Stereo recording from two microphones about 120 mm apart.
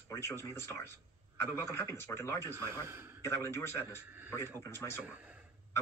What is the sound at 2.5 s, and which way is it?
Speech, 20° right (ahead or behind).